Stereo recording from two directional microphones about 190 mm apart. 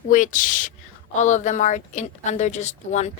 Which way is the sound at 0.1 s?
40° left (ahead or behind).